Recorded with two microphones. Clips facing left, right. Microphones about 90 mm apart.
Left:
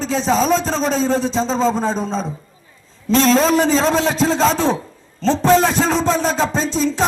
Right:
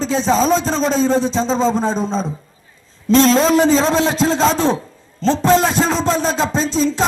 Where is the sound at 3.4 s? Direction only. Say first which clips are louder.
Right 2 dB; 25° right (ahead or behind).